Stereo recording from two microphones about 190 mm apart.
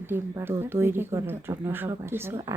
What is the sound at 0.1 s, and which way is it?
Speech, 10° right (ahead or behind).